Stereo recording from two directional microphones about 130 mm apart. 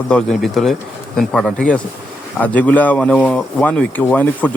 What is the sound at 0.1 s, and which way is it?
Speech, 5° left (ahead or behind).